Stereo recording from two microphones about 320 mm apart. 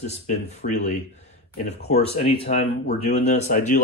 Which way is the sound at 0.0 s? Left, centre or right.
Left.